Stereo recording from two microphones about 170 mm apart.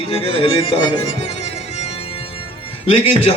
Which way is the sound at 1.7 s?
35° left (ahead or behind).